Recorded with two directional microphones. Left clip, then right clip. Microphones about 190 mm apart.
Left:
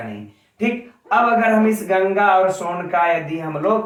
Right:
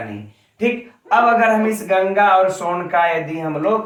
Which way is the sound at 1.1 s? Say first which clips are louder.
Right 2 dB; 15° left (ahead or behind).